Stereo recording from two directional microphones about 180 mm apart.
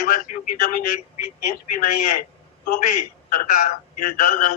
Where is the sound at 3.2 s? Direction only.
50° left (ahead or behind).